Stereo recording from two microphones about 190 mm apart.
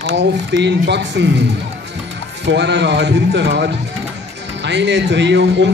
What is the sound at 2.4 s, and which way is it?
Speech, 65° right (ahead or behind).